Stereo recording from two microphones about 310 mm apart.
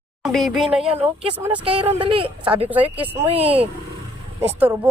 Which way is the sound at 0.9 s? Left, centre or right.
Centre.